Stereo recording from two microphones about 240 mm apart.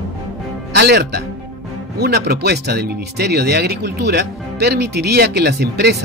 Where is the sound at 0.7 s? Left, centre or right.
Right.